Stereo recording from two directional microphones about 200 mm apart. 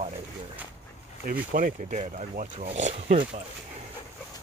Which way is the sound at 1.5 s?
40° right (ahead or behind).